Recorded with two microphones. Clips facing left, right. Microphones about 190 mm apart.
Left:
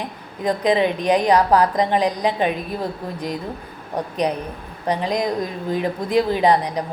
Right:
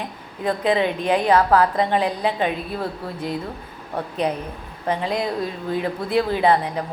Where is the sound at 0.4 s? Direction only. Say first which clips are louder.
Left 2 dB; 15° left (ahead or behind).